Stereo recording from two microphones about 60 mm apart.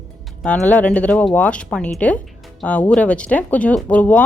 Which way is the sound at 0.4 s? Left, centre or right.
Left.